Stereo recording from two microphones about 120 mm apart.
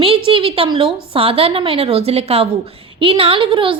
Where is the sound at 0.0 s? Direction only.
50° right (ahead or behind).